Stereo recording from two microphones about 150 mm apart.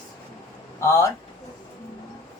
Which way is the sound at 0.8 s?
20° left (ahead or behind).